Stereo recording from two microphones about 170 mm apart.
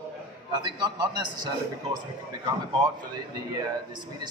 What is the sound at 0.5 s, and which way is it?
A man's voice, 25° right (ahead or behind).